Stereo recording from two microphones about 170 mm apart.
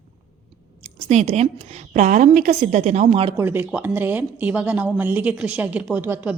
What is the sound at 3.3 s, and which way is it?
Speech, 15° right (ahead or behind).